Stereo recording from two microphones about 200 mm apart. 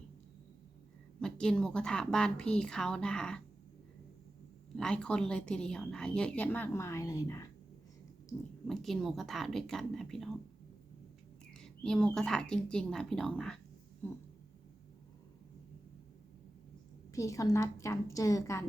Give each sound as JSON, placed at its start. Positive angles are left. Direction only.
{"t": 1.2, "sound": "a woman's voice", "side_deg": 5}
{"t": 4.8, "sound": "a woman's voice", "side_deg": 5}
{"t": 8.6, "sound": "a woman's voice", "side_deg": 0}
{"t": 11.5, "sound": "a woman's voice", "side_deg": 5}
{"t": 14.0, "sound": "a sound", "side_deg": 10}
{"t": 17.1, "sound": "a woman's voice", "side_deg": 15}